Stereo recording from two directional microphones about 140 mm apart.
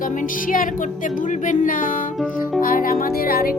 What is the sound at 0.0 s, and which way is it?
Music, 70° left (ahead or behind).